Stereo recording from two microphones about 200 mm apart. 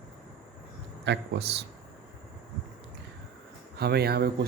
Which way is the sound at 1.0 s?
60° right (ahead or behind).